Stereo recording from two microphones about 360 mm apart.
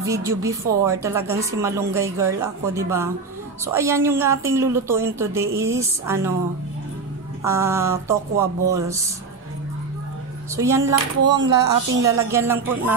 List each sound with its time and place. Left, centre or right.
0.0 s speech: centre
7.4 s speech: centre
10.5 s speech: centre
11.4 s a woman's voice: right
12.0 s speech: centre